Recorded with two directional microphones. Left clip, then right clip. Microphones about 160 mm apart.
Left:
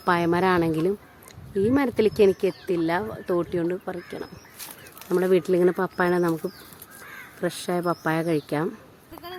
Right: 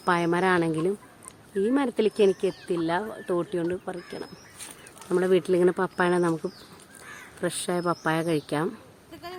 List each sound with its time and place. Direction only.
0.0 s speech: 15° left (ahead or behind)